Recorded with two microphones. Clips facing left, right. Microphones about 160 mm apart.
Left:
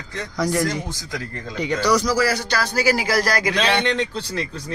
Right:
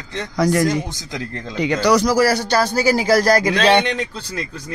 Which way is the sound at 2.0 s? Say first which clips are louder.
Right 4 dB; 45° right (ahead or behind).